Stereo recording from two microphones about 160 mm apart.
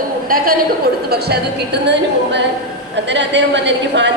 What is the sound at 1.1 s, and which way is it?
A woman's voice, 90° right.